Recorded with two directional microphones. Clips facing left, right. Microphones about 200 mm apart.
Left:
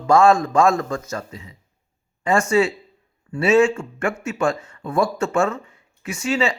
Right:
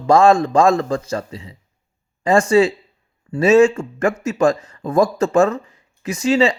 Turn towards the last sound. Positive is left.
turn(degrees=-35)  # may be behind; listen again after turning